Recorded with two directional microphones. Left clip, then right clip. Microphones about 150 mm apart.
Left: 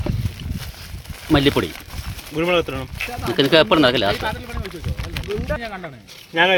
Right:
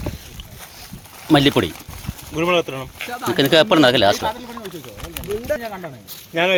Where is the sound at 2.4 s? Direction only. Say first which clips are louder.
Right 1 dB; 85° left.